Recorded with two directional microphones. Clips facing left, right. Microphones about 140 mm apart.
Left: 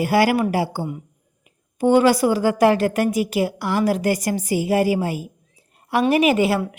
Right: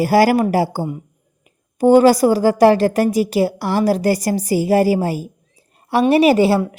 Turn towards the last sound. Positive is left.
turn(degrees=-30)  # may be behind; listen again after turning